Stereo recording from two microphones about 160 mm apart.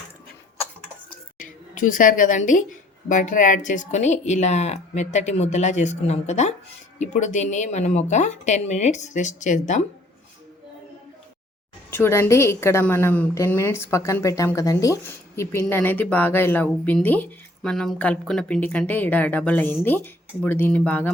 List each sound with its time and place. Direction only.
1.4 s a woman's voice: 55° left (ahead or behind)
11.9 s a woman's voice: 15° left (ahead or behind)